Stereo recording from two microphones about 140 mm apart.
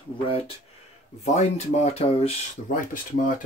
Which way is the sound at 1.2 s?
55° left (ahead or behind).